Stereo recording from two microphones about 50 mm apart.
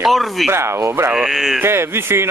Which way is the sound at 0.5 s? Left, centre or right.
Right.